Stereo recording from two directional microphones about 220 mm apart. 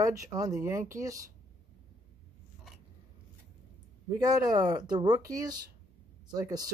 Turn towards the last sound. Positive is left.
turn(degrees=-15)  # may be behind; listen again after turning